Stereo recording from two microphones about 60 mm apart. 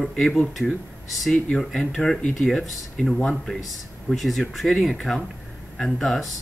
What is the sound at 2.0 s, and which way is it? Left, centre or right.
Speech, centre.